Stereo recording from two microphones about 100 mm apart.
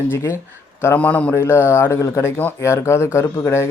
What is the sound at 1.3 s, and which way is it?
Speech, 25° left (ahead or behind).